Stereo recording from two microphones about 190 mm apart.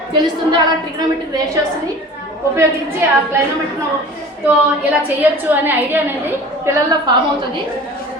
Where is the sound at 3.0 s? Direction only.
10° right (ahead or behind).